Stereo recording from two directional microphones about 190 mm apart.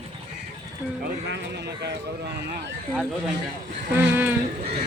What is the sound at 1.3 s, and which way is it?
Speech, 65° right (ahead or behind).